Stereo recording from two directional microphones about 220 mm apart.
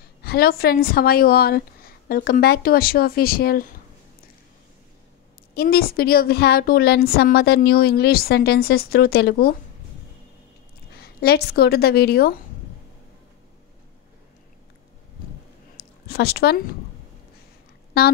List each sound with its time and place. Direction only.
0.2 s a woman's voice: 45° left (ahead or behind)
5.5 s a woman's voice: 45° left (ahead or behind)
11.0 s a woman's voice: 45° left (ahead or behind)
15.8 s speech: 45° left (ahead or behind)
17.9 s a woman's voice: 45° left (ahead or behind)